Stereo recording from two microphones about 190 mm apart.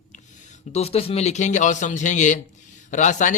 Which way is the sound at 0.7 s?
35° left (ahead or behind).